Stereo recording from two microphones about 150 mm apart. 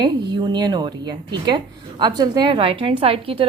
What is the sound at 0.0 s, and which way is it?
A woman's voice, 30° right (ahead or behind).